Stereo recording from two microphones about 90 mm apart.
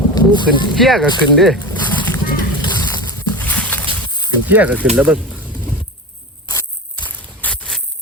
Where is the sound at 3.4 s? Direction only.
15° left (ahead or behind).